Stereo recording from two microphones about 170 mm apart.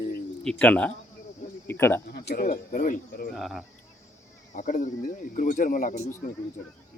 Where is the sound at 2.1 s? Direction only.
65° left (ahead or behind).